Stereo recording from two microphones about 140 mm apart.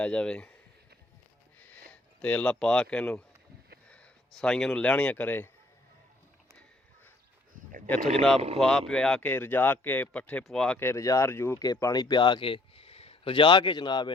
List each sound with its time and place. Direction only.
0.0 s speech: 5° left (ahead or behind)
1.9 s a man's voice: 10° left (ahead or behind)
7.9 s speech: 10° left (ahead or behind)
10.8 s speech: 20° left (ahead or behind)